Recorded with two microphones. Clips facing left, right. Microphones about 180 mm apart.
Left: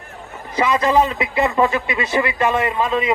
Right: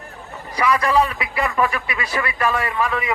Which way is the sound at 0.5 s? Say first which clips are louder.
Left 2 dB; 25° left (ahead or behind).